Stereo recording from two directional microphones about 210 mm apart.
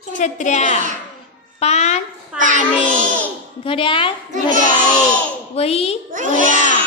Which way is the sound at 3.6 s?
25° left (ahead or behind).